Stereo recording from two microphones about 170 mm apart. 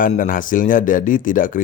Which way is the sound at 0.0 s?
50° left (ahead or behind).